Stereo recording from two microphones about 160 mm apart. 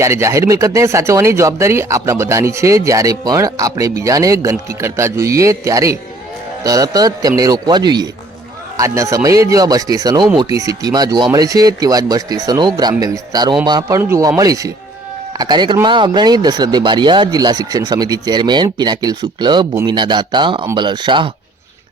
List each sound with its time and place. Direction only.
0.0 s speech: 15° right (ahead or behind)